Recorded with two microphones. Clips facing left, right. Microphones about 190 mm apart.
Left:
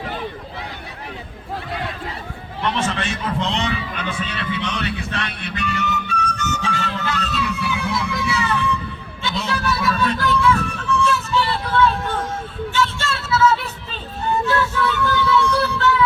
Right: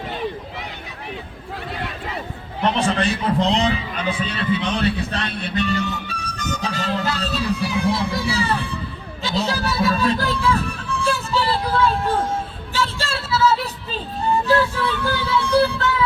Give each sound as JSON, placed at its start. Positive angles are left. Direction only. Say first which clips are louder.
{"t": 2.6, "sound": "a man's voice", "louder": "right 3 dB", "side_deg": -35}
{"t": 11.0, "sound": "music", "louder": "right 1 dB", "side_deg": -35}